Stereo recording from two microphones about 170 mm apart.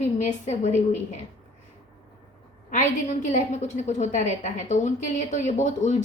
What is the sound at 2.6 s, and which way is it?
A woman's voice, 45° left (ahead or behind).